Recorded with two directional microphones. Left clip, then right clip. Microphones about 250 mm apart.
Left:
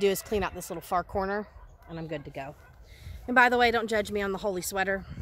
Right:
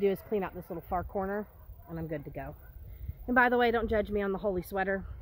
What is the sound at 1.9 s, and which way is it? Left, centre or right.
Speech, centre.